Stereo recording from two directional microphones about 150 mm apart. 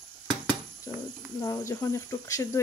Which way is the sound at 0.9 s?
25° left (ahead or behind).